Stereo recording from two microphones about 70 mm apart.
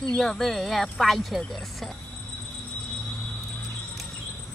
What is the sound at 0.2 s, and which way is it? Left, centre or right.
Speech, centre.